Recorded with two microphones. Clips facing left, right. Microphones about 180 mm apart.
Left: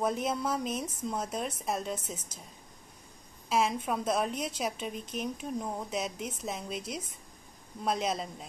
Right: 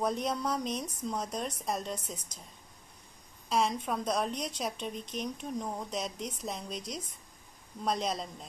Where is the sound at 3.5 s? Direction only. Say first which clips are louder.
Left 1 dB; 5° left (ahead or behind).